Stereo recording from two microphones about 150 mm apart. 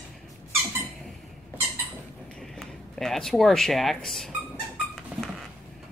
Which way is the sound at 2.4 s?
5° left (ahead or behind).